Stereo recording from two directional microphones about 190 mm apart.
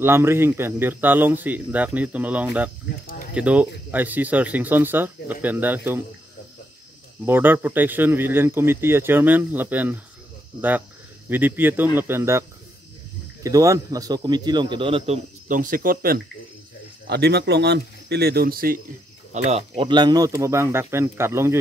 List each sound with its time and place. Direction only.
0.0 s speech: 15° right (ahead or behind)
7.2 s speech: 10° right (ahead or behind)
11.2 s a man's voice: 10° right (ahead or behind); by 15.1 s 30° right (ahead or behind)
15.4 s speech: 45° right (ahead or behind)
17.1 s speech: 60° right (ahead or behind)
19.3 s speech: 35° right (ahead or behind); by 21.5 s 15° right (ahead or behind)